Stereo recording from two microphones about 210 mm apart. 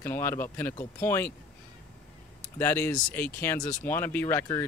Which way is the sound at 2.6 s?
10° left (ahead or behind).